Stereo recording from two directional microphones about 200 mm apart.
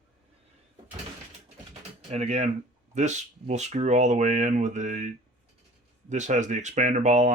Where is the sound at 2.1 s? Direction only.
35° right (ahead or behind).